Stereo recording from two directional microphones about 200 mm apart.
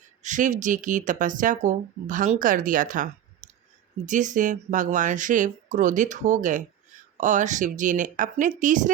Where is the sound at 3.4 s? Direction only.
40° right (ahead or behind).